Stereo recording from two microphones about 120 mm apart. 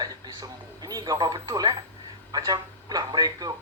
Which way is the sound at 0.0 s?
35° right (ahead or behind).